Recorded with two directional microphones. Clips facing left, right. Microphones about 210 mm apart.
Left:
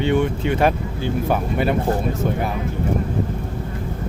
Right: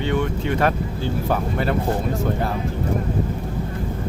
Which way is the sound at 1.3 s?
15° left (ahead or behind).